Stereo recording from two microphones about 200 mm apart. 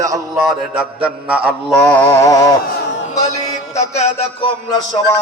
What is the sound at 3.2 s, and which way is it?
A man's voice, 35° left (ahead or behind).